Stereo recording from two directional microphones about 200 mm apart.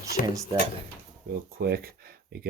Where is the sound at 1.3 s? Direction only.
50° right (ahead or behind).